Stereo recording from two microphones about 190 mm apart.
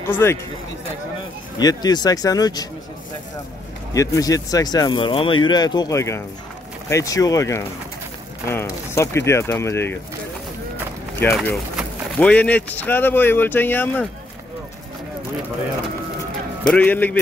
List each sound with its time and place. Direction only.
0.1 s speech: 15° left (ahead or behind)
1.6 s speech: 20° left (ahead or behind)
3.9 s speech: 15° left (ahead or behind)
11.3 s speech: centre (ahead or behind)
16.7 s speech: 10° left (ahead or behind)